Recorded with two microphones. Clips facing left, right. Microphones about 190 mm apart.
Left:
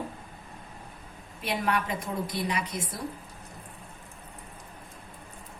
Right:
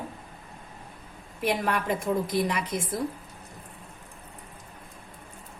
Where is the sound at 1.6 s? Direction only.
50° right (ahead or behind).